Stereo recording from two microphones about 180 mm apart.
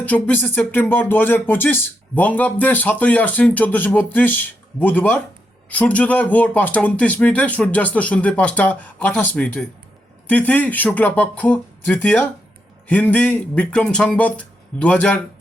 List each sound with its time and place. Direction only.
0.0 s speech: 10° left (ahead or behind)